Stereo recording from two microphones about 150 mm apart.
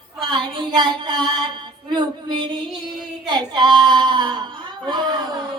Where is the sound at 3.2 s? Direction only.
30° right (ahead or behind).